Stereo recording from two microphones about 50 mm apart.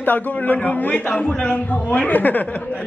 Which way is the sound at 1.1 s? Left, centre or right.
Left.